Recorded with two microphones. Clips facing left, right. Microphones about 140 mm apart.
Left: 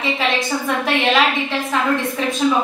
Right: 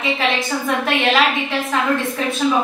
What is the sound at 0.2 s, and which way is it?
A woman's voice, centre (ahead or behind).